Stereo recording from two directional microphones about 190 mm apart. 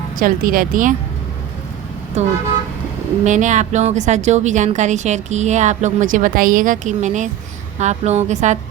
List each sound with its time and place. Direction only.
0.2 s speech: 50° right (ahead or behind)
2.2 s speech: 35° right (ahead or behind)